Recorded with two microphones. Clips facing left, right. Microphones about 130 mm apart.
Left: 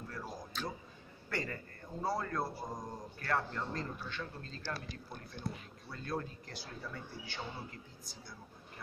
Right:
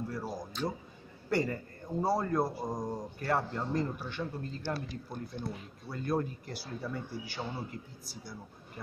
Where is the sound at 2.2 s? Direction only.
15° right (ahead or behind).